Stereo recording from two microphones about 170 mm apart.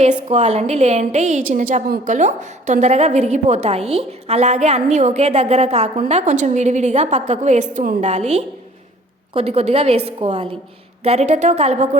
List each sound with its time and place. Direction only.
0.0 s a woman's voice: 45° right (ahead or behind)